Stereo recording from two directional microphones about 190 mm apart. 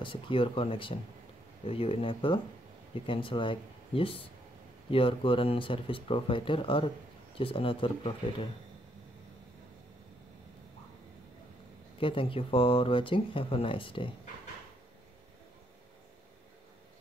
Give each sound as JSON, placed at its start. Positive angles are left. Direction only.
{"t": 0.0, "sound": "speech", "side_deg": 25}
{"t": 12.0, "sound": "speech", "side_deg": 30}